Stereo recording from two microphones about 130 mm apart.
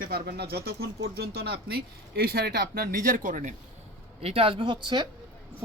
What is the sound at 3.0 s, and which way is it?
Speech, 90° right.